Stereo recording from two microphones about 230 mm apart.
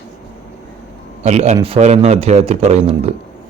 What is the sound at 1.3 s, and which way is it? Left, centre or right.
Speech, right.